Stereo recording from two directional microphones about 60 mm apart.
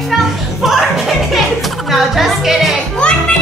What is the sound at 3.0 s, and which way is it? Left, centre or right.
Music, centre.